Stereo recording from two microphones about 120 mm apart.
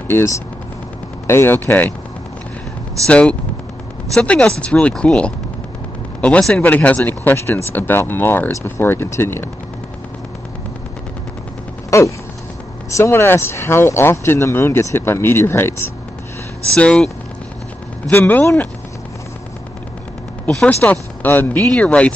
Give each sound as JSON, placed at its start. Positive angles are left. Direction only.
{"t": 1.2, "sound": "speech", "side_deg": 20}
{"t": 3.1, "sound": "speech", "side_deg": 10}
{"t": 11.9, "sound": "a sound", "side_deg": 25}
{"t": 12.9, "sound": "speech", "side_deg": 20}
{"t": 16.7, "sound": "speech", "side_deg": 5}
{"t": 18.1, "sound": "speech", "side_deg": 15}
{"t": 20.4, "sound": "speech", "side_deg": 10}